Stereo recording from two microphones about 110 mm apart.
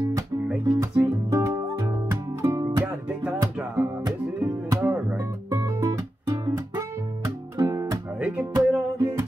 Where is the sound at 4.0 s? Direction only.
30° right (ahead or behind).